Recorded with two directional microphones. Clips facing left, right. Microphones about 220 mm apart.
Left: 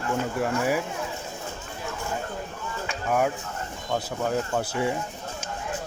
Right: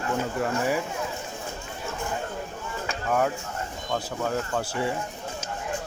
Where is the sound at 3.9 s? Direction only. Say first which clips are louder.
Left 2 dB; 10° left (ahead or behind).